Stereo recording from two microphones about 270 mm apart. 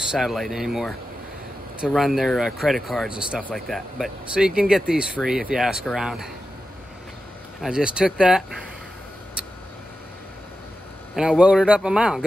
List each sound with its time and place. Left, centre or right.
0.0 s speech: centre
7.6 s speech: centre
11.1 s speech: centre